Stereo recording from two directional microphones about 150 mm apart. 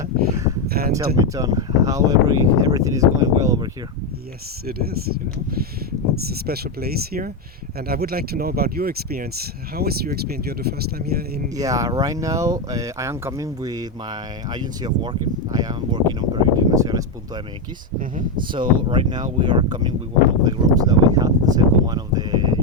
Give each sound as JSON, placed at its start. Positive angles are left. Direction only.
{"t": 0.0, "sound": "a sound", "side_deg": -20}
{"t": 0.7, "sound": "a sound", "side_deg": -90}
{"t": 0.9, "sound": "speech", "side_deg": -20}
{"t": 4.6, "sound": "speech", "side_deg": -90}
{"t": 6.2, "sound": "speech", "side_deg": -90}
{"t": 11.5, "sound": "speech", "side_deg": -25}
{"t": 18.5, "sound": "speech", "side_deg": -35}